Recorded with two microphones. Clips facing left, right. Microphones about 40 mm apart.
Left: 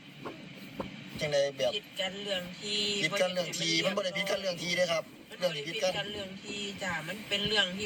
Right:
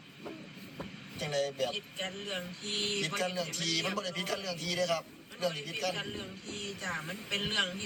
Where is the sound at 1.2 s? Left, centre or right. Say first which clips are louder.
Left 4 dB; left.